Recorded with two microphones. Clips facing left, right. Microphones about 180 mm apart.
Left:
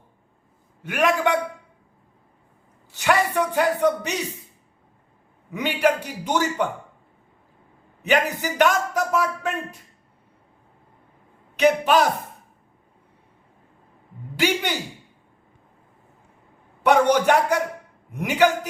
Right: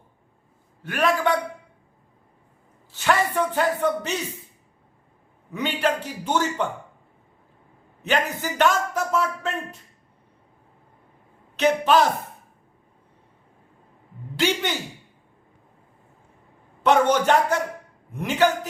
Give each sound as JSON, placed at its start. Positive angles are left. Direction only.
{"t": 0.8, "sound": "a man's voice", "side_deg": 20}
{"t": 2.9, "sound": "speech", "side_deg": 15}
{"t": 5.5, "sound": "a man's voice", "side_deg": 15}
{"t": 8.0, "sound": "a man's voice", "side_deg": 15}
{"t": 11.5, "sound": "a man's voice", "side_deg": 15}
{"t": 14.4, "sound": "a man's voice", "side_deg": 15}
{"t": 16.8, "sound": "a man's voice", "side_deg": 10}